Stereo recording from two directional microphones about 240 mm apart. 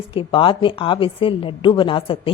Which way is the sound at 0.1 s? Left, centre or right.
Left.